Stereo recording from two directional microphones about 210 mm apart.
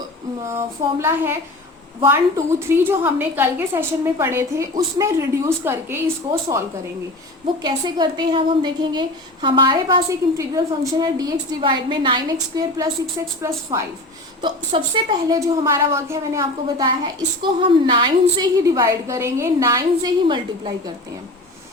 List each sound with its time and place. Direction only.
0.4 s a woman's voice: 10° right (ahead or behind)
7.6 s a woman's voice: 20° right (ahead or behind)